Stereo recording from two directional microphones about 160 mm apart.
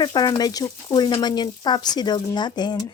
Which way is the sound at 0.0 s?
25° left (ahead or behind).